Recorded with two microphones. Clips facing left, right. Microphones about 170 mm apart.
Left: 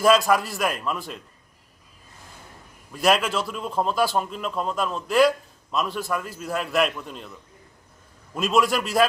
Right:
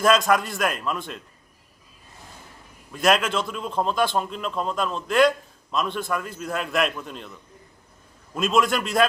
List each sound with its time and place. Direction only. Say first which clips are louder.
0.0 s a man's voice: left 1 dB; 5° left (ahead or behind)
2.9 s a man's voice: even; centre (ahead or behind)
8.4 s a man's voice: even; centre (ahead or behind)